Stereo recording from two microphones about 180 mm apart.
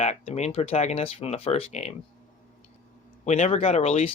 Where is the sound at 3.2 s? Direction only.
40° left (ahead or behind).